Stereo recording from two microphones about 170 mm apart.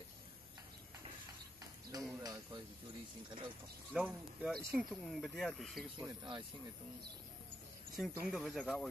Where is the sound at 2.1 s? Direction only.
20° right (ahead or behind).